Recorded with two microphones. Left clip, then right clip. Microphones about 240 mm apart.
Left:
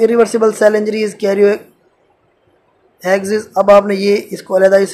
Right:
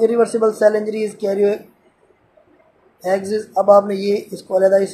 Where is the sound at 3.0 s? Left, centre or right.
Centre.